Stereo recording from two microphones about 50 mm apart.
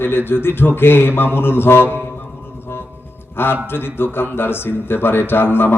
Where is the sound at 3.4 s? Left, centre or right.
Left.